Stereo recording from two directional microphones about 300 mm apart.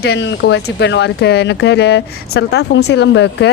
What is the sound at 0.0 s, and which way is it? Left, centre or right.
Speech, left.